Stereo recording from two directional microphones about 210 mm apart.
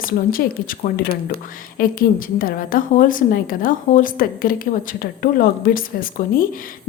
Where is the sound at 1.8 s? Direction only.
45° left (ahead or behind).